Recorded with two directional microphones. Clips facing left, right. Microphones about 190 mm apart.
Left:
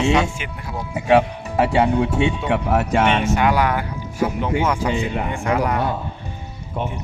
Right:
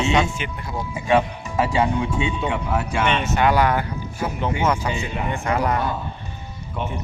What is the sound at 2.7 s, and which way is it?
Speech, 45° left (ahead or behind).